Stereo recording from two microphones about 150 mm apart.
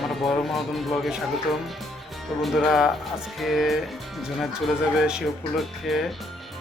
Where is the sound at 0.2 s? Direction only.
Centre (ahead or behind).